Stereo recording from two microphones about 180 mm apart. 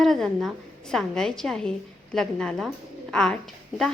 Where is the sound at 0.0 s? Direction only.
Centre (ahead or behind).